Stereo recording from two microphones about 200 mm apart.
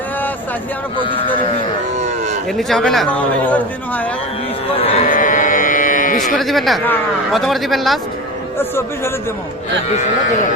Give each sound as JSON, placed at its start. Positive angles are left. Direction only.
{"t": 0.9, "sound": "speech", "side_deg": 25}
{"t": 2.0, "sound": "livestock", "side_deg": -35}
{"t": 2.6, "sound": "speech", "side_deg": 0}
{"t": 4.8, "sound": "speech", "side_deg": 30}
{"t": 5.0, "sound": "carnatic music", "side_deg": 40}
{"t": 6.3, "sound": "speech", "side_deg": 0}